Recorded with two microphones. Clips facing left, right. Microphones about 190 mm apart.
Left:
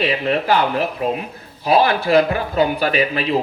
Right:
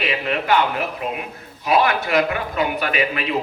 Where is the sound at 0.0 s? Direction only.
35° left (ahead or behind).